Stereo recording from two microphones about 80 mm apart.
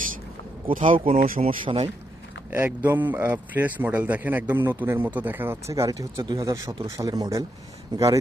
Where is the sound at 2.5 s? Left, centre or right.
Right.